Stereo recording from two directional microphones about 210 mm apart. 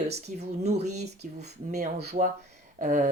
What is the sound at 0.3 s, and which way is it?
Speech, 30° right (ahead or behind).